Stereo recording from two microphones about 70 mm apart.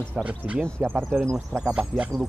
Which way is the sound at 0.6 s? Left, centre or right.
Right.